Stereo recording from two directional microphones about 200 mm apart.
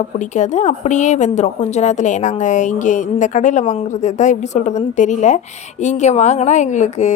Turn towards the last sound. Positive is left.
turn(degrees=35)  # may be behind; listen again after turning